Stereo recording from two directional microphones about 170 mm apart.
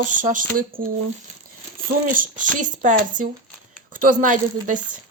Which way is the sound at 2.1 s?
50° right (ahead or behind).